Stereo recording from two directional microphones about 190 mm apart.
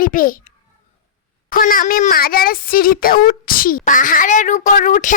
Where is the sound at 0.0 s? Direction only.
45° left (ahead or behind).